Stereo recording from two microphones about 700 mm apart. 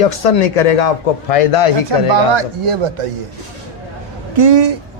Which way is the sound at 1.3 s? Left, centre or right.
Left.